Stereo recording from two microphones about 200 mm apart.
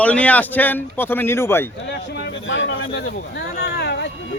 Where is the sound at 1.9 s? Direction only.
60° left (ahead or behind).